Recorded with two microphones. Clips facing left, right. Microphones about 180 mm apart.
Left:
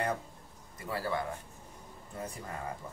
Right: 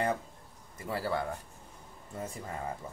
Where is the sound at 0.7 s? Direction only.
25° right (ahead or behind).